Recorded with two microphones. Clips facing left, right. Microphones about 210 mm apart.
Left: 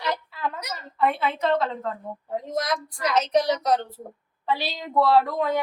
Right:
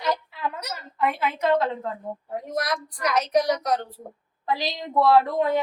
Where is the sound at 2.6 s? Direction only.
25° left (ahead or behind).